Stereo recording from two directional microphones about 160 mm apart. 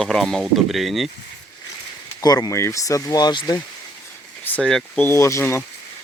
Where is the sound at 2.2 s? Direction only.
25° left (ahead or behind).